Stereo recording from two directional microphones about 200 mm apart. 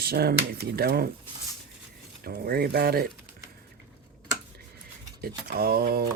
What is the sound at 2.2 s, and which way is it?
Speech, 50° right (ahead or behind).